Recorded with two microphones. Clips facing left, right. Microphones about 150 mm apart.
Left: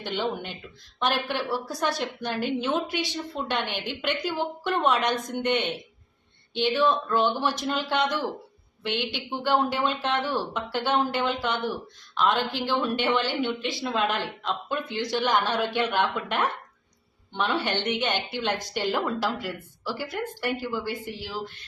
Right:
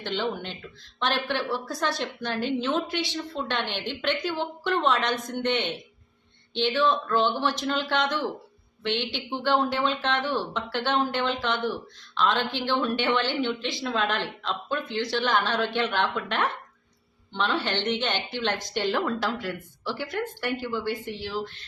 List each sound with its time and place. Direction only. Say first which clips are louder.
0.0 s a woman's voice: even; 10° left (ahead or behind)